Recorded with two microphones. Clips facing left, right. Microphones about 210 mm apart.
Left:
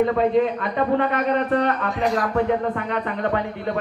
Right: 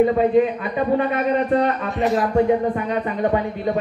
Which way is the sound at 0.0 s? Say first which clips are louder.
Right 3 dB; 10° right (ahead or behind).